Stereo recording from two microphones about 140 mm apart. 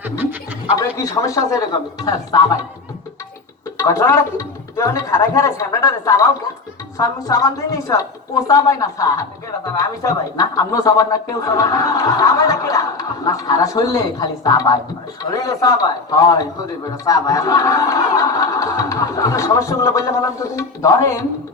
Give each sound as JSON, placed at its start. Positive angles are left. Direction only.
{"t": 0.0, "sound": "speech", "side_deg": -15}
{"t": 1.1, "sound": "speech", "side_deg": 25}
{"t": 3.8, "sound": "speech", "side_deg": 20}